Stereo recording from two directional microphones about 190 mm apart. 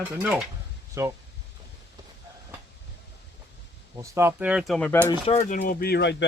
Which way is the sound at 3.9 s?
15° right (ahead or behind).